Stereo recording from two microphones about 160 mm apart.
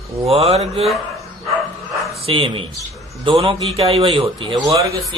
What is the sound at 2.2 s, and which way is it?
A man's voice, 35° right (ahead or behind).